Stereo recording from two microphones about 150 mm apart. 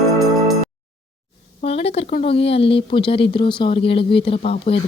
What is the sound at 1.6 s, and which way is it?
A woman's voice, 40° left (ahead or behind).